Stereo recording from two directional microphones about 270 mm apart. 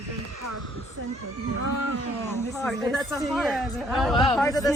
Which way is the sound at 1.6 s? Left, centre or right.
Right.